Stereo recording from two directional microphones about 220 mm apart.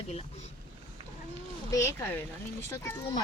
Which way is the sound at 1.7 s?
15° left (ahead or behind).